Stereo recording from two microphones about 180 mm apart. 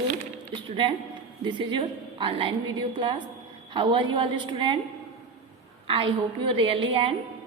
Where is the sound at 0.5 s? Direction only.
25° right (ahead or behind).